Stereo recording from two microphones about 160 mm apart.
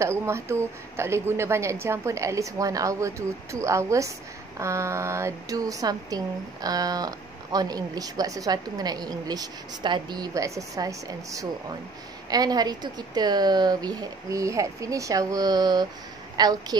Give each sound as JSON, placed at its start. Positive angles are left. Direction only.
{"t": 0.0, "sound": "a woman's voice", "side_deg": -15}